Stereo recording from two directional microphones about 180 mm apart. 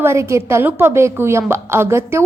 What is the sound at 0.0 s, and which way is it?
A woman's voice, 15° right (ahead or behind).